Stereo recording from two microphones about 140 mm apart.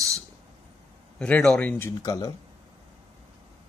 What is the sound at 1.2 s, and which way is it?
Speech, 5° left (ahead or behind).